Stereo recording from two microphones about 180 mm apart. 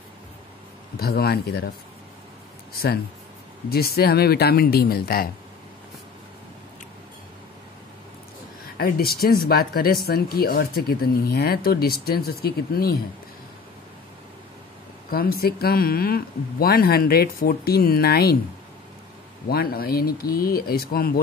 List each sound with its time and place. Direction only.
0.9 s speech: 60° left (ahead or behind)
2.7 s speech: 60° left (ahead or behind)
8.7 s speech: 55° left (ahead or behind)
15.0 s speech: 55° left (ahead or behind)
19.5 s speech: 55° left (ahead or behind)